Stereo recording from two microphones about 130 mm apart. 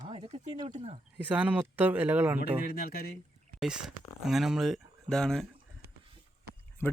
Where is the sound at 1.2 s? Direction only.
10° right (ahead or behind).